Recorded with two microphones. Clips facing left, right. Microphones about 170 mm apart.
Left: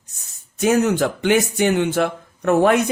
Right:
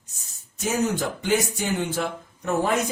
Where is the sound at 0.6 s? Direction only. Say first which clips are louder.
Left 8 dB; 70° left (ahead or behind).